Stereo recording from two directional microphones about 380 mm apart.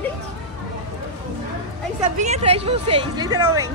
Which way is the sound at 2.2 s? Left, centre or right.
Centre.